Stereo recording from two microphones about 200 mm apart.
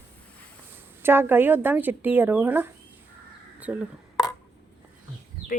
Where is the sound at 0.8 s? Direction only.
10° right (ahead or behind).